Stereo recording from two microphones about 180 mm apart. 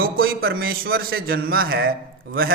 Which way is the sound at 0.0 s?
55° right (ahead or behind).